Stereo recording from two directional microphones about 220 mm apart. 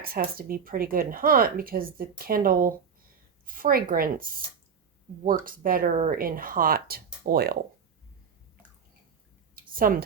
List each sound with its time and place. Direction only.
0.0 s a woman's voice: 40° right (ahead or behind)
5.5 s a woman's voice: 40° right (ahead or behind)
9.6 s a sound: 40° right (ahead or behind)